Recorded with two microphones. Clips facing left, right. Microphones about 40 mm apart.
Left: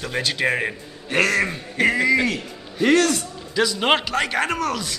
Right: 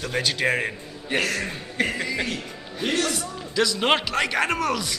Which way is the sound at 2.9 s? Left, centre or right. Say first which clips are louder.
Left 7 dB; left.